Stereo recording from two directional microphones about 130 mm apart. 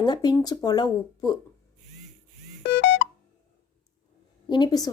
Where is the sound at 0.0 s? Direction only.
35° left (ahead or behind).